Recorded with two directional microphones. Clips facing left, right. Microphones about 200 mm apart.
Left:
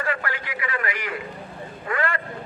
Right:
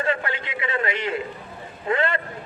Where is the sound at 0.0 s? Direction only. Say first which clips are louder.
Right 3 dB; 25° right (ahead or behind).